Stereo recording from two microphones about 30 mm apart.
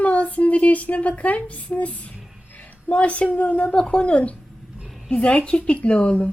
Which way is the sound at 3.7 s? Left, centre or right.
Left.